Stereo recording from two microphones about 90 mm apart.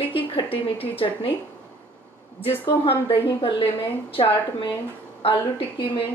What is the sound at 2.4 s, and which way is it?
A woman's voice, 90° left.